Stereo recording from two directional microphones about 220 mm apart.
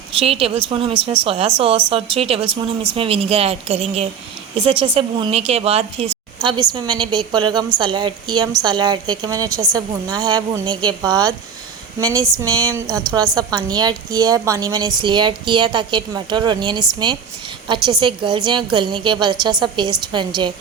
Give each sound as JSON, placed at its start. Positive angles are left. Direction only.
{"t": 0.2, "sound": "a woman's voice", "side_deg": -25}